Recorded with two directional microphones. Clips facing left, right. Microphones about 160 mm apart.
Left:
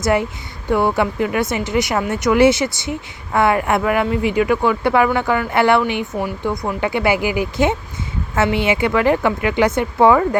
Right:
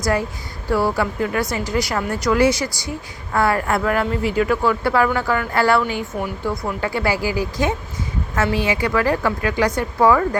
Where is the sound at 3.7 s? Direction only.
10° left (ahead or behind).